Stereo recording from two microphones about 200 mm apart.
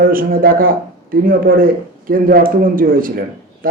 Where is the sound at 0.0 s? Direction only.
45° right (ahead or behind).